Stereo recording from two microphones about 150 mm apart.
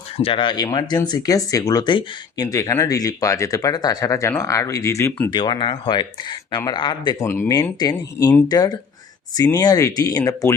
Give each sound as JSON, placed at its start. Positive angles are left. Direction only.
{"t": 0.2, "sound": "speech", "side_deg": 35}
{"t": 5.3, "sound": "speech", "side_deg": 30}
{"t": 7.3, "sound": "speech", "side_deg": 20}